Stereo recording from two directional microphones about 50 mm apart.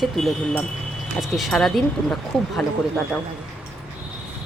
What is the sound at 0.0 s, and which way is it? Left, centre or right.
Speech, centre.